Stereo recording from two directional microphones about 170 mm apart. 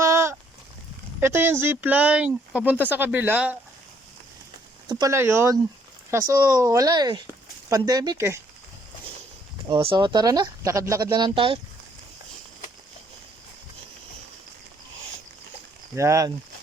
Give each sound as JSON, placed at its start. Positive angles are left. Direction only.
{"t": 0.0, "sound": "a sound", "side_deg": -15}
{"t": 1.2, "sound": "speech", "side_deg": -15}
{"t": 4.9, "sound": "speech", "side_deg": -20}
{"t": 9.6, "sound": "speech", "side_deg": -30}
{"t": 16.0, "sound": "speech", "side_deg": -20}